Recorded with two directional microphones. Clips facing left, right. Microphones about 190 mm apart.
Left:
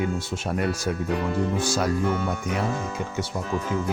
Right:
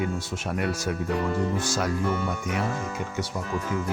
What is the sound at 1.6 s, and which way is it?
Speech, 30° left (ahead or behind).